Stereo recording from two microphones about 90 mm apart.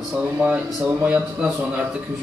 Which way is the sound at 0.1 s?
15° right (ahead or behind).